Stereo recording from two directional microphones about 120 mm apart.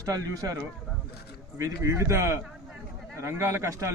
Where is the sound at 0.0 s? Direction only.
30° right (ahead or behind).